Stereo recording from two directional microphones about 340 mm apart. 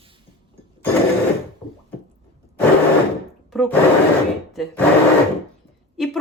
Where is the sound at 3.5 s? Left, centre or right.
Centre.